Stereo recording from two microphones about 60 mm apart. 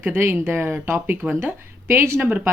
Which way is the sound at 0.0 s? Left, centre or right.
Right.